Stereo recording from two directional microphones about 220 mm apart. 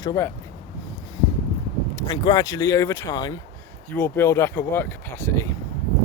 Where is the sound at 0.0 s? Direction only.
15° left (ahead or behind).